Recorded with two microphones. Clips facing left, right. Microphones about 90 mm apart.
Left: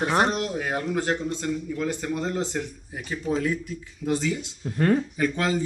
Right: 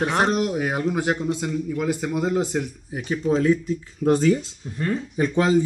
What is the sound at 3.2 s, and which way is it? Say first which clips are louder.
Speech: right 6 dB; 30° right (ahead or behind).